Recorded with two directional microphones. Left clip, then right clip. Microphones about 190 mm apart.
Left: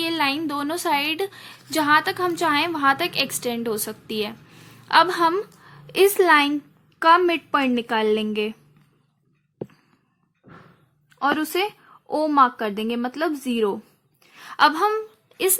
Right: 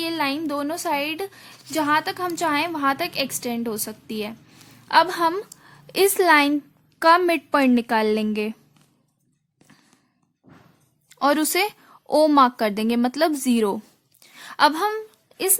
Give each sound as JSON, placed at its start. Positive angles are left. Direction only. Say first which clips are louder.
{"t": 0.0, "sound": "a woman's voice", "louder": "left 2 dB", "side_deg": -25}
{"t": 11.1, "sound": "a woman's voice", "louder": "right 2 dB", "side_deg": -45}
{"t": 14.2, "sound": "a sound", "louder": "left 1 dB", "side_deg": -40}